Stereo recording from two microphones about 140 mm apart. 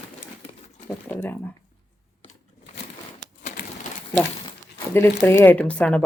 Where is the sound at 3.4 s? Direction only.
65° left (ahead or behind).